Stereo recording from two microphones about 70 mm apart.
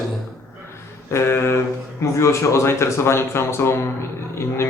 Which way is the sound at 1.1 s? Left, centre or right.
Left.